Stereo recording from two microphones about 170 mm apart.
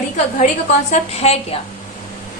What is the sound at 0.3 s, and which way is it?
A woman's voice, 45° left (ahead or behind).